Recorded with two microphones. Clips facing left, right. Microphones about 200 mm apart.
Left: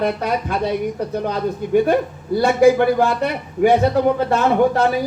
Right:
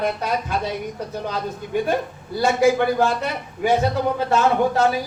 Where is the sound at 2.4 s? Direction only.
60° left (ahead or behind).